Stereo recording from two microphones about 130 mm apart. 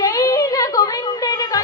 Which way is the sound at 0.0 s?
30° left (ahead or behind).